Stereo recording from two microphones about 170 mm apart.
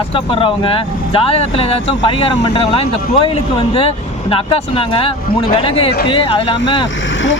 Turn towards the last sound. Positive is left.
turn(degrees=30)  # may be behind; listen again after turning